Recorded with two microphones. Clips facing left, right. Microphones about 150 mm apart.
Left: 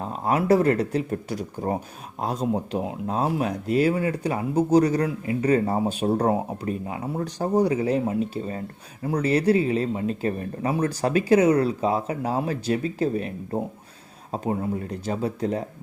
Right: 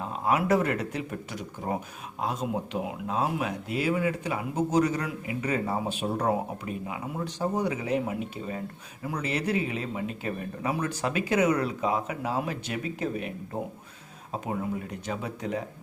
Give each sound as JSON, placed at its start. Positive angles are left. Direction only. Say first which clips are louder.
{"t": 0.3, "sound": "speech", "louder": "left 5 dB", "side_deg": 35}
{"t": 14.4, "sound": "speech", "louder": "left 5 dB", "side_deg": 35}